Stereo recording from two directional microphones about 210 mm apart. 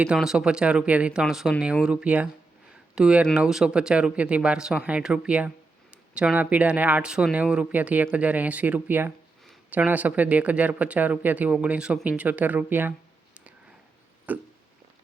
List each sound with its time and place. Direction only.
0.0 s speech: 5° right (ahead or behind)
14.3 s speech: 5° right (ahead or behind)